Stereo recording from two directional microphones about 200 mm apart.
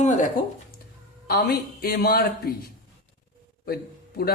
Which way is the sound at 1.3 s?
50° left (ahead or behind).